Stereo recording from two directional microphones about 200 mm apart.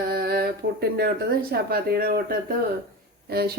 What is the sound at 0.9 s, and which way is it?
Speech, 50° right (ahead or behind).